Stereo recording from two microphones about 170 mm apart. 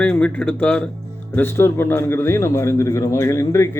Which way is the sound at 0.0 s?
5° left (ahead or behind).